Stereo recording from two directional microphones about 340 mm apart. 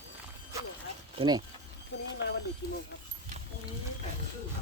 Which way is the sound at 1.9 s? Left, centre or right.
Left.